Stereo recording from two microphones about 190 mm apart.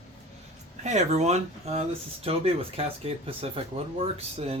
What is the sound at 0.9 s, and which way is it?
Speech, 35° right (ahead or behind).